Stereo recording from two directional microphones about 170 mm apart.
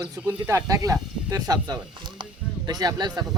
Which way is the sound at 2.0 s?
25° right (ahead or behind).